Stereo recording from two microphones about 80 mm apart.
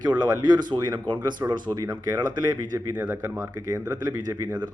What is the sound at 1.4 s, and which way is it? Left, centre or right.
Speech, right.